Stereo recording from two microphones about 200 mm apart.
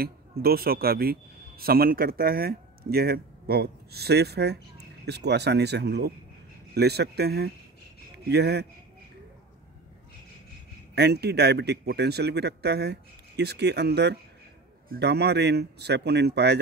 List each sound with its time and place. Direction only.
0.0 s a man's voice: 50° right (ahead or behind)
11.0 s a man's voice: 55° right (ahead or behind)